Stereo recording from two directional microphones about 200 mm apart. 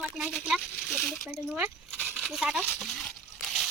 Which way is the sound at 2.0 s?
Centre (ahead or behind).